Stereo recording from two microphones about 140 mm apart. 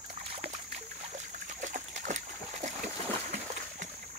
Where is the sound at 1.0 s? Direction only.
60° right (ahead or behind).